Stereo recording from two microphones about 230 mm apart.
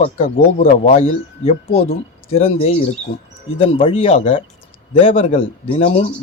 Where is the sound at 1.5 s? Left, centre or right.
Left.